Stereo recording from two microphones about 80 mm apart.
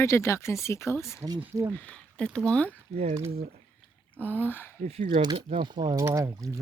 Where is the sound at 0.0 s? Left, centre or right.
Left.